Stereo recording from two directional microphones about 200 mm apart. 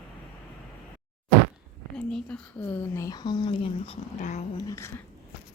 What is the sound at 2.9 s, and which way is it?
Speech, 15° left (ahead or behind).